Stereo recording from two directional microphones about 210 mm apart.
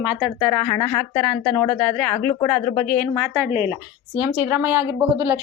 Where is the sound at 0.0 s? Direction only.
5° right (ahead or behind).